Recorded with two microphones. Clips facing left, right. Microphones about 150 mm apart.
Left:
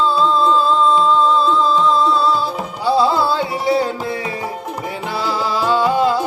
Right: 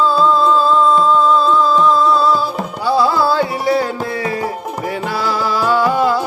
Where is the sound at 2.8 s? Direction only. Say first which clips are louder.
Right 1 dB; 25° left (ahead or behind).